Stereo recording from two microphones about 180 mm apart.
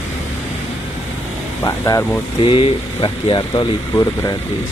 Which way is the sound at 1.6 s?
15° left (ahead or behind).